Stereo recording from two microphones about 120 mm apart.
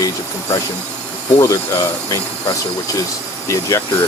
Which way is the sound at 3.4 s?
25° left (ahead or behind).